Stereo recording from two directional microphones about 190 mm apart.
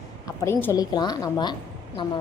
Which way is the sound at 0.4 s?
15° left (ahead or behind).